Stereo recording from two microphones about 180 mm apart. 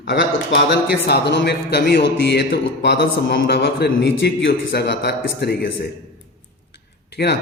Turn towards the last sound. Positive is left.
turn(degrees=65)  # may be behind; listen again after turning